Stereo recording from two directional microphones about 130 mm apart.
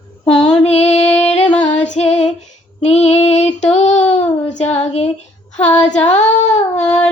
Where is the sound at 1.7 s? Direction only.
65° left (ahead or behind).